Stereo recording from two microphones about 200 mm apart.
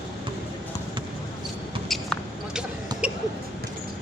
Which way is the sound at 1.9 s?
Centre (ahead or behind).